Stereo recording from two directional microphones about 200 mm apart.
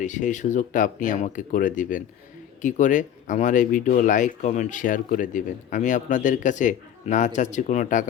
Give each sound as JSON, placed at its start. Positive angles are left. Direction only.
{"t": 0.0, "sound": "speech", "side_deg": 40}